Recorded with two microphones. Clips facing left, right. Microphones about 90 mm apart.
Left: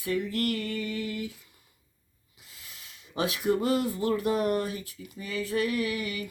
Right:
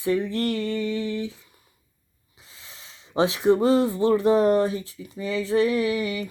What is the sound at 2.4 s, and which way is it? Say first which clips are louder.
Speech: right 3 dB; 30° right (ahead or behind).